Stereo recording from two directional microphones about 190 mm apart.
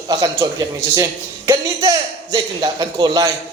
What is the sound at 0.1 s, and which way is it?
Speech, 20° right (ahead or behind).